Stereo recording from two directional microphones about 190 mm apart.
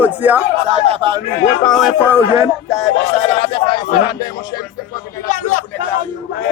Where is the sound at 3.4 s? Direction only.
30° left (ahead or behind).